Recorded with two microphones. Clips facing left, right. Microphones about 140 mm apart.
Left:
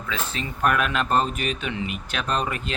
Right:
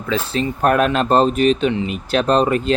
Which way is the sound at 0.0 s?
35° right (ahead or behind).